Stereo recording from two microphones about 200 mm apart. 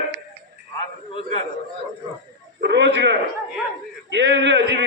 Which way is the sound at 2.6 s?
60° right (ahead or behind).